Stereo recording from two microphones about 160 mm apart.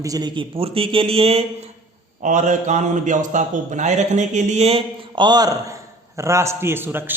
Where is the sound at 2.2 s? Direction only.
50° right (ahead or behind).